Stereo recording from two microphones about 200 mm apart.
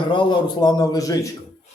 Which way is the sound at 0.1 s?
25° left (ahead or behind).